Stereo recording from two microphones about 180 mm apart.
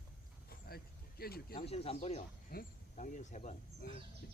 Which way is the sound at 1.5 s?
35° left (ahead or behind).